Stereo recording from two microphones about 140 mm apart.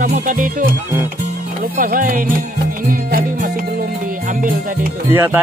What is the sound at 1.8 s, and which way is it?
Music, 80° right.